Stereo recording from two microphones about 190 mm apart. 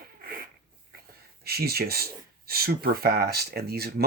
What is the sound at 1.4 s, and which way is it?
Speech, 55° right (ahead or behind).